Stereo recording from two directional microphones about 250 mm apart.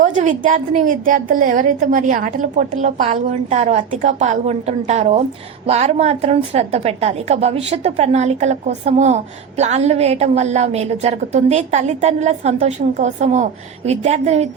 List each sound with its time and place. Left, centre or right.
0.0 s a woman's voice: right